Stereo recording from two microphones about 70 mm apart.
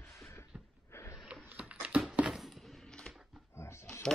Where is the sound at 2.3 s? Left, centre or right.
Centre.